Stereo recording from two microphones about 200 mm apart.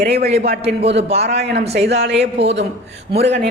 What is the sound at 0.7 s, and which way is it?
Speech, 30° right (ahead or behind).